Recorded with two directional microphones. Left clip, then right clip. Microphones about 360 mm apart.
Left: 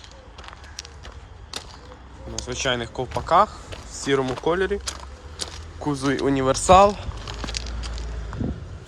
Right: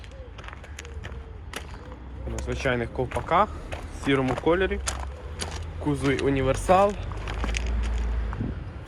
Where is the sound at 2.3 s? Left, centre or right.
Centre.